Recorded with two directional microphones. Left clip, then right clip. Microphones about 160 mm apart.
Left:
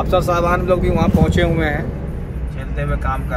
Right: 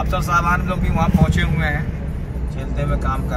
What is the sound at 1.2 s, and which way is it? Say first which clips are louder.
Speech: left 5 dB; 45° left (ahead or behind).